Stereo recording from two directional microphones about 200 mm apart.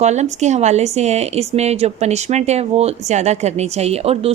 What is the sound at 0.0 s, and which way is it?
Speech, 35° right (ahead or behind).